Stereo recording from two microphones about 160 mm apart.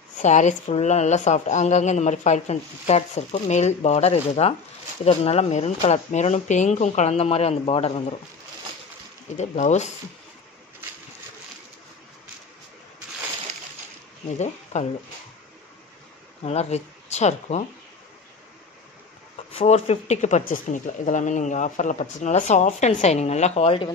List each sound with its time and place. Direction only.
0.2 s speech: 50° left (ahead or behind)
9.4 s speech: 45° left (ahead or behind)
14.4 s speech: 45° left (ahead or behind)
16.4 s speech: 40° left (ahead or behind)
19.5 s speech: 40° left (ahead or behind)